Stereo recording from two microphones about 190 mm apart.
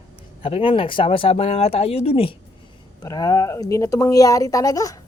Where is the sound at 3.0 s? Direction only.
20° left (ahead or behind).